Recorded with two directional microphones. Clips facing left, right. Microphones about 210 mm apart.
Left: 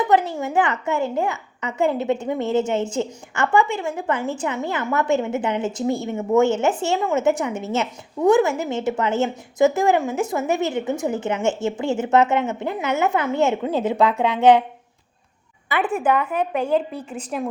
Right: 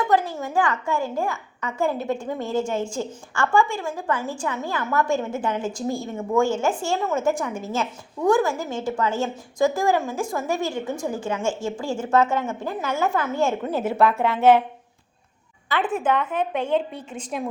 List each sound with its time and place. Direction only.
0.1 s a woman's voice: 20° left (ahead or behind)
15.7 s a woman's voice: 10° left (ahead or behind)